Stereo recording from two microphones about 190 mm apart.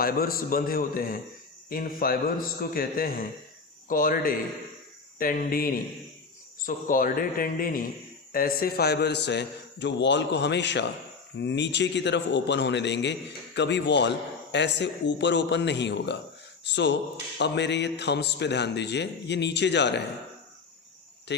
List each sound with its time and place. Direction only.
0.0 s a man's voice: 50° left (ahead or behind)
21.3 s speech: 65° left (ahead or behind)